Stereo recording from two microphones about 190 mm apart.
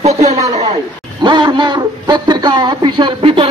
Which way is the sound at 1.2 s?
25° right (ahead or behind).